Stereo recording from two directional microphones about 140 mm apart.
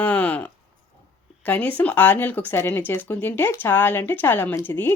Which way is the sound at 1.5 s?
10° left (ahead or behind).